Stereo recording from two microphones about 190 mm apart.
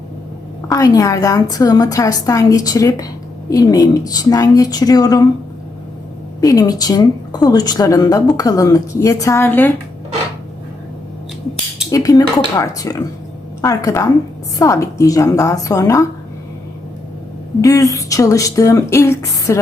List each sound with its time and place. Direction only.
0.7 s a woman's voice: 20° left (ahead or behind)
6.4 s a woman's voice: 20° left (ahead or behind)
11.9 s a woman's voice: 20° left (ahead or behind)
17.6 s speech: 15° left (ahead or behind)